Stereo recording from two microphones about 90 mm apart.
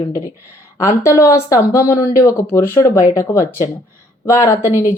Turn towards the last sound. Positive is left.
turn(degrees=30)  # may be behind; listen again after turning